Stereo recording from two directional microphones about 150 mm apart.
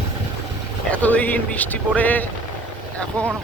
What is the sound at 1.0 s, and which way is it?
Speech, 10° left (ahead or behind).